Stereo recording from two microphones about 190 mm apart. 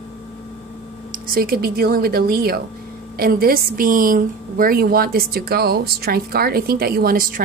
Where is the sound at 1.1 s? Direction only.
50° right (ahead or behind).